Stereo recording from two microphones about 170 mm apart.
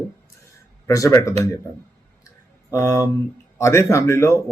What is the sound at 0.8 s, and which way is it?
Speech, 20° left (ahead or behind).